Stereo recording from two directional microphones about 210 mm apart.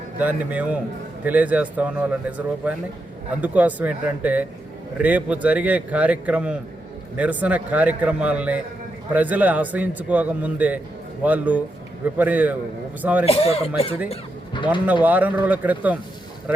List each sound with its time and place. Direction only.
0.2 s a man's voice: 5° right (ahead or behind)
13.2 s speech: 30° left (ahead or behind)
15.0 s a man's voice: 10° right (ahead or behind)